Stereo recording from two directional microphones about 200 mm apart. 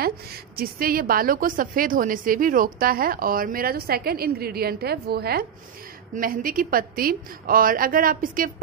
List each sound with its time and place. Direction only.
0.6 s a woman's voice: 45° right (ahead or behind)